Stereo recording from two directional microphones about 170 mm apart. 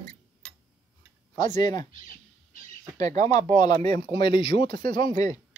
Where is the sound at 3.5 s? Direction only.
25° left (ahead or behind).